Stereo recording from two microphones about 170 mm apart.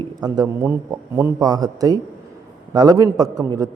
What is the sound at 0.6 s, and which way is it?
Speech, 15° right (ahead or behind).